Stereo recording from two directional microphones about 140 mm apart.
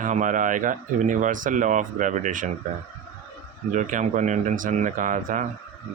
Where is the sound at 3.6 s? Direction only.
65° right (ahead or behind).